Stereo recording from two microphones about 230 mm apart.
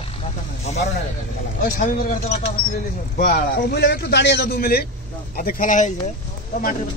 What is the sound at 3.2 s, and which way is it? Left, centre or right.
A man's voice, left.